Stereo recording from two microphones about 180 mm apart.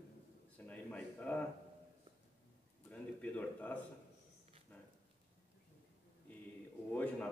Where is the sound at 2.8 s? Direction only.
10° left (ahead or behind).